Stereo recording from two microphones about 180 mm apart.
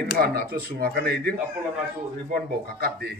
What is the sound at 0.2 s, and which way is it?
Speech, 60° right (ahead or behind).